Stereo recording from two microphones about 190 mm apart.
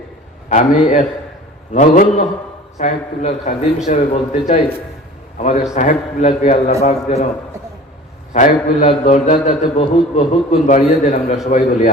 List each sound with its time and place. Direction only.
0.4 s a man's voice: 40° left (ahead or behind)
8.3 s a man's voice: 40° left (ahead or behind)